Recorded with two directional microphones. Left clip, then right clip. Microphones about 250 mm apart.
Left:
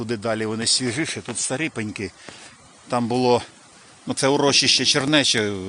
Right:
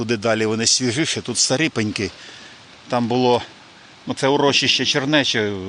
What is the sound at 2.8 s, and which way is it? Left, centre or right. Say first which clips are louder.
Speech: right 2 dB; centre.